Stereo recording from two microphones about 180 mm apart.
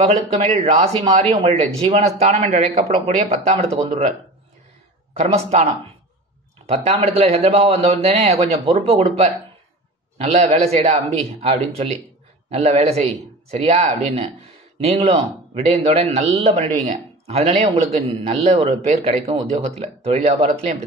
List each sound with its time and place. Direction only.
1.3 s a man's voice: 35° right (ahead or behind)
5.1 s a man's voice: 35° right (ahead or behind)